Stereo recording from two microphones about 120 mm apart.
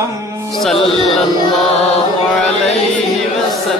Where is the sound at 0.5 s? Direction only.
Centre (ahead or behind).